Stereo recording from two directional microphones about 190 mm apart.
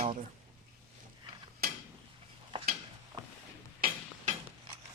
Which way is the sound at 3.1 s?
20° right (ahead or behind).